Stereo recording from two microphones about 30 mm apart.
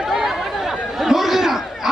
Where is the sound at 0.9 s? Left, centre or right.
Centre.